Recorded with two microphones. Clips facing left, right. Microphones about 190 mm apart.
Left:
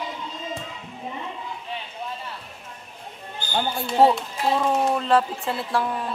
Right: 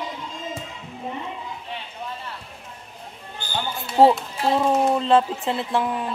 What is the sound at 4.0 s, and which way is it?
Speech, 25° right (ahead or behind).